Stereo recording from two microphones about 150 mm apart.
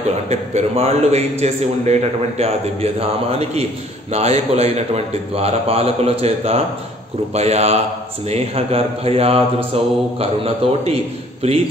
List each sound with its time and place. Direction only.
0.3 s a man's voice: 45° right (ahead or behind)